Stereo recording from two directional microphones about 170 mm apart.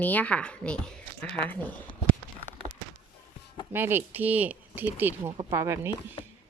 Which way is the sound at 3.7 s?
15° right (ahead or behind).